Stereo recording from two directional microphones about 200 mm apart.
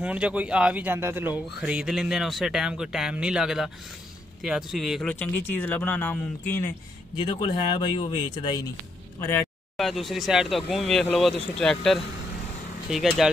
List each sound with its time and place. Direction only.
0.0 s speech: 5° right (ahead or behind); by 6.7 s 10° left (ahead or behind)
7.2 s speech: 25° left (ahead or behind)
9.8 s speech: centre (ahead or behind)